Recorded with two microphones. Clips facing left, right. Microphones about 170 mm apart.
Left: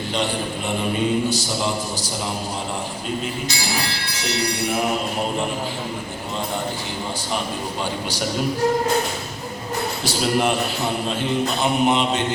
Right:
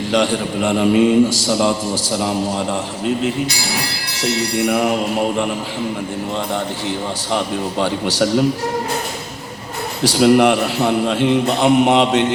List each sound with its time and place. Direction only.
0.1 s a man's voice: 90° right
7.3 s a man's voice: 75° right (ahead or behind)
10.0 s a man's voice: 80° right